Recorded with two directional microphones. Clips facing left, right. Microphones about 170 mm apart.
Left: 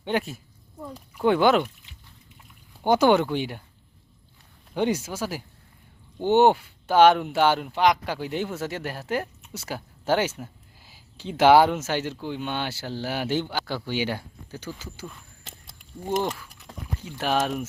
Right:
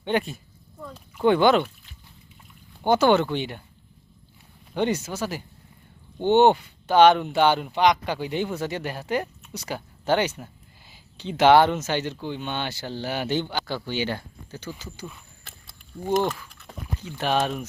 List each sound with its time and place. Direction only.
0.0 s speech: 5° left (ahead or behind)
0.8 s speech: 15° left (ahead or behind)
1.2 s speech: 5° left (ahead or behind)
2.8 s speech: 10° left (ahead or behind)
4.7 s speech: 10° left (ahead or behind)
15.4 s horse: 20° left (ahead or behind)
17.2 s speech: 5° left (ahead or behind)